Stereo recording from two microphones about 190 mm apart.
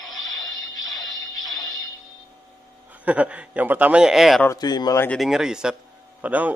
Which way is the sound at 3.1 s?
5° right (ahead or behind).